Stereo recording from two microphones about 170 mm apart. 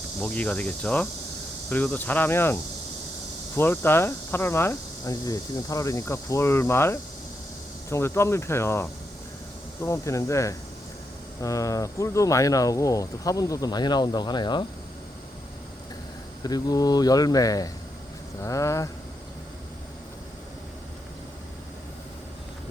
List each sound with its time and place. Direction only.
0.2 s speech: 10° left (ahead or behind); by 14.6 s 25° left (ahead or behind)
16.4 s speech: 25° left (ahead or behind)